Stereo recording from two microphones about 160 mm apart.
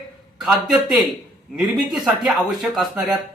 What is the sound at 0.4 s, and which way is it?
Speech, 5° right (ahead or behind).